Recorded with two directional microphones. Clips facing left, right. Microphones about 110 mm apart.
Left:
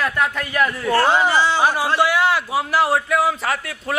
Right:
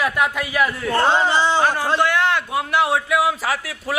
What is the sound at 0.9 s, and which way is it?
Speech, 25° right (ahead or behind).